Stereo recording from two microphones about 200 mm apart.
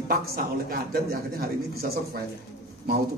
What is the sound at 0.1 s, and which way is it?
Speech, 50° right (ahead or behind).